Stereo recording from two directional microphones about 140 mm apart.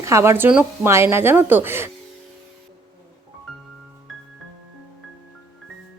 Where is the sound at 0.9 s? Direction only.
20° right (ahead or behind).